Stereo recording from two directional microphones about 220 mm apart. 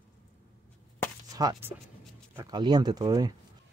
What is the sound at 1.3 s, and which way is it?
Speech, 15° right (ahead or behind).